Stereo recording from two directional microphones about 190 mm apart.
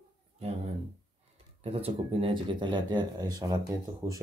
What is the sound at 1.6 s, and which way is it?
Speech, 30° right (ahead or behind).